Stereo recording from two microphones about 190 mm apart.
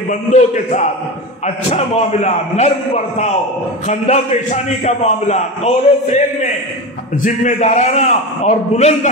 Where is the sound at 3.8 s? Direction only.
35° left (ahead or behind).